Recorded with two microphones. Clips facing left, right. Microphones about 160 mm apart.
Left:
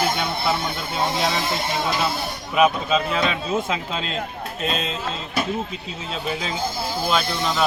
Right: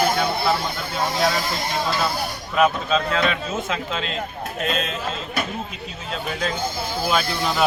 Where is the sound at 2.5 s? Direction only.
10° left (ahead or behind).